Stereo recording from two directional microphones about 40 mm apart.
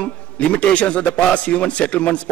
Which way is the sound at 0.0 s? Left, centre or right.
Left.